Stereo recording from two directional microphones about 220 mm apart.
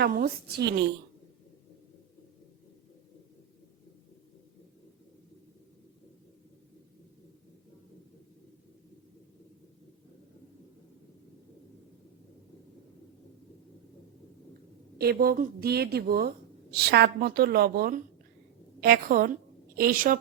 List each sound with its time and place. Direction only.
0.0 s a woman's voice: 45° right (ahead or behind)
14.9 s a woman's voice: 45° right (ahead or behind)